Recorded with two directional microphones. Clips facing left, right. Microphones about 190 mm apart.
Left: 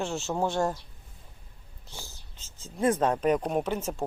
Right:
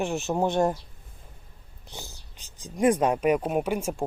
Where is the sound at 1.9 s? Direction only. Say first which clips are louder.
Right 3 dB; 20° right (ahead or behind).